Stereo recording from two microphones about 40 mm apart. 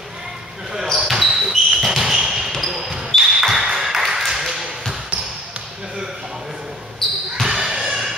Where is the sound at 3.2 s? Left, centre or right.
Centre.